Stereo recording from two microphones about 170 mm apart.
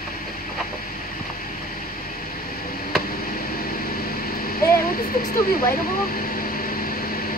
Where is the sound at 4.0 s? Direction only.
60° left (ahead or behind).